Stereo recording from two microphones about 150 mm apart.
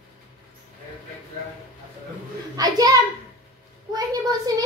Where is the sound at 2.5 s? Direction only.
25° right (ahead or behind).